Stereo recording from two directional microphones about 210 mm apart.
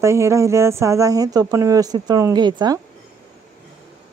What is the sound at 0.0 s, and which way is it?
Speech, 15° right (ahead or behind).